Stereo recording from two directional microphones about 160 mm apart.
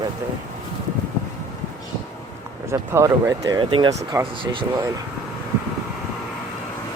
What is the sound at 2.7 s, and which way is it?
Speech, 15° right (ahead or behind).